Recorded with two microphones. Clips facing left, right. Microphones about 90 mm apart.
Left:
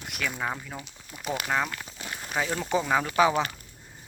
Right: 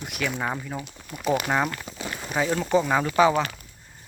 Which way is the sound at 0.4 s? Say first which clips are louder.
Right 3 dB; 5° right (ahead or behind).